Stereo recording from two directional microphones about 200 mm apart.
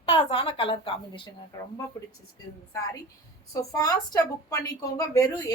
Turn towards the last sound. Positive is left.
turn(degrees=15)  # may be behind; listen again after turning